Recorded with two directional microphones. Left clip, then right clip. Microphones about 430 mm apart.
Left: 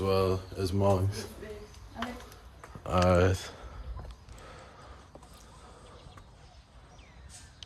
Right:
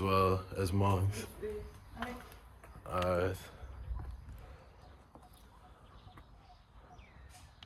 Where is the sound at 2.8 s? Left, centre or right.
Left.